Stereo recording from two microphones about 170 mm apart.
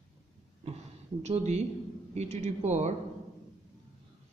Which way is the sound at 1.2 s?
40° right (ahead or behind).